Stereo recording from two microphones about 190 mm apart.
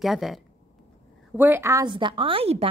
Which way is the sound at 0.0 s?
Centre (ahead or behind).